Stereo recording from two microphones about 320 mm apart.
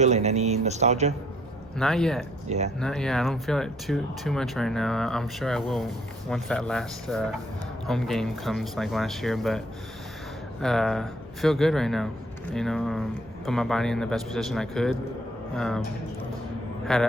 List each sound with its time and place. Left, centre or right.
0.0 s speech: right
1.8 s speech: centre
2.5 s speech: right
2.8 s speech: centre
16.8 s a man's voice: centre